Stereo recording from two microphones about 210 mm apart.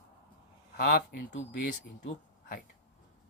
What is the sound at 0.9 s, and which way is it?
Speech, 50° left (ahead or behind).